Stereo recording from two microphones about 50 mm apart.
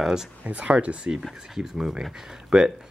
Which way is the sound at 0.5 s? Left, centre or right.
Right.